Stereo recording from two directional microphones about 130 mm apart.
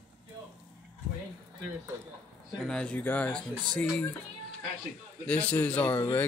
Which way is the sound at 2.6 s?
5° left (ahead or behind).